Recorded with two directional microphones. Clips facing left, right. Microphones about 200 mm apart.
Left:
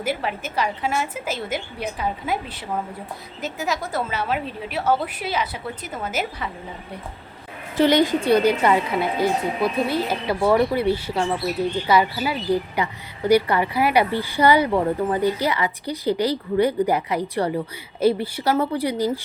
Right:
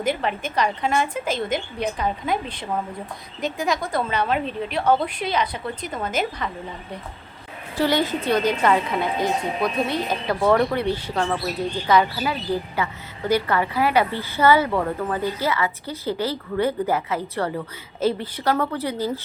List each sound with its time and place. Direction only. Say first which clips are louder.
0.0 s a woman's voice: right 2 dB; 5° left (ahead or behind)
7.8 s a woman's voice: left 4 dB; 20° left (ahead or behind)